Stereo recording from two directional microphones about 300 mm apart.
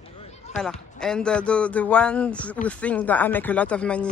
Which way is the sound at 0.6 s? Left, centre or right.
Centre.